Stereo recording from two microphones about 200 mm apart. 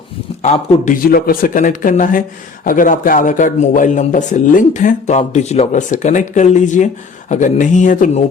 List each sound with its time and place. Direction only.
0.4 s a man's voice: 35° left (ahead or behind)
1.0 s a man's voice: 45° left (ahead or behind)